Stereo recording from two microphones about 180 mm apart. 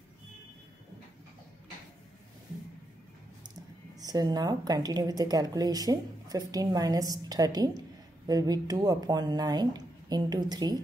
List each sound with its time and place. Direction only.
4.0 s a woman's voice: 20° right (ahead or behind)